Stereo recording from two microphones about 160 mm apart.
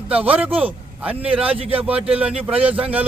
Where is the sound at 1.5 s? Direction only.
35° right (ahead or behind).